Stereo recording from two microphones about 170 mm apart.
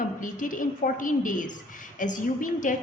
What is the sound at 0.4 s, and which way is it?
A woman's voice, 50° left (ahead or behind).